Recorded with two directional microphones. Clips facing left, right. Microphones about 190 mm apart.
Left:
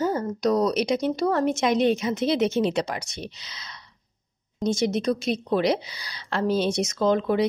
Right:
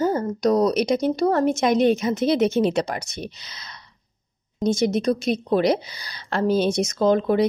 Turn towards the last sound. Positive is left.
turn(degrees=-45)  # may be behind; listen again after turning